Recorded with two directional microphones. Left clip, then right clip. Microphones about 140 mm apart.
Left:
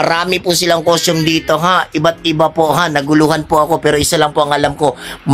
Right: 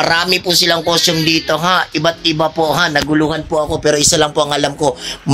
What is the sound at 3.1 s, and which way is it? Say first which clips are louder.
Speech: left 4 dB; 60° left (ahead or behind).